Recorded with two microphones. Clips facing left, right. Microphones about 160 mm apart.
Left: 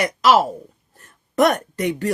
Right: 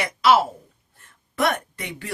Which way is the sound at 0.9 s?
40° left (ahead or behind).